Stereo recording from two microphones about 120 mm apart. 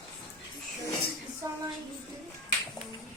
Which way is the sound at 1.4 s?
30° right (ahead or behind).